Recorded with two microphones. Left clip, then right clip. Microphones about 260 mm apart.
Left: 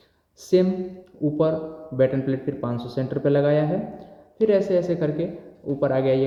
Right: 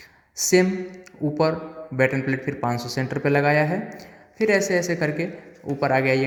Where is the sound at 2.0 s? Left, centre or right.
Right.